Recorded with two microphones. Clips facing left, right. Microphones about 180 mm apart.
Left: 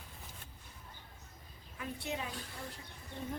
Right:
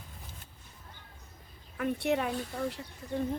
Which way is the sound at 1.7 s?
65° right (ahead or behind).